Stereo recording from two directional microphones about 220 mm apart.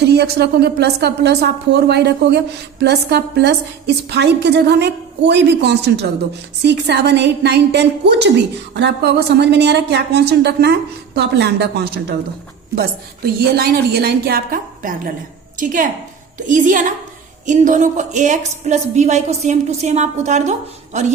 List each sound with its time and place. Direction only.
0.0 s a woman's voice: 50° right (ahead or behind); by 21.1 s 30° right (ahead or behind)